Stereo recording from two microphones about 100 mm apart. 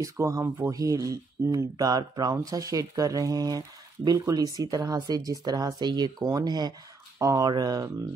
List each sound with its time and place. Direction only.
0.0 s speech: 30° right (ahead or behind)